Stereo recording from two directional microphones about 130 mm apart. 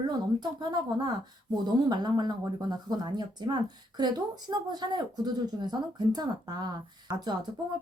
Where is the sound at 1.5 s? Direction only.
35° right (ahead or behind).